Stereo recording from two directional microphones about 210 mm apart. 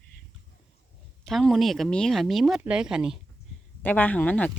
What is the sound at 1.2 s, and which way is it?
Speech, centre (ahead or behind).